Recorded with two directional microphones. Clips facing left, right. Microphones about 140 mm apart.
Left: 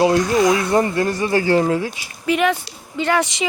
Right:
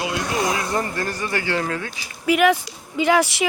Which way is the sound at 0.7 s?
25° left (ahead or behind).